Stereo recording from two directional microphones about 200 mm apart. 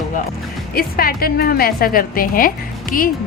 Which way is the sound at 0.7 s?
45° left (ahead or behind).